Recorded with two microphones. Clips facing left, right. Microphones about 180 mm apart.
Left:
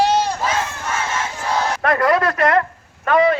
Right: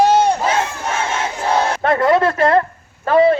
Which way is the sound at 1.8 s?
25° right (ahead or behind).